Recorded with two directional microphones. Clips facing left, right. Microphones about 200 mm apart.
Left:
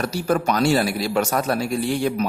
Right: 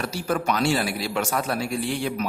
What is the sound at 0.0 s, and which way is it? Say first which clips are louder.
Speech: left 4 dB; 40° left (ahead or behind).